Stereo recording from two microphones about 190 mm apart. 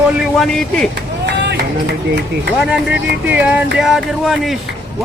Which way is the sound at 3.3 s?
10° right (ahead or behind).